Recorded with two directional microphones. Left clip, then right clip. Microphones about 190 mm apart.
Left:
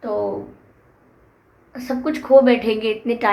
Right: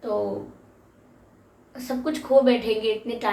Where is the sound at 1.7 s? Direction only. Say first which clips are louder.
Left 4 dB; 45° left (ahead or behind).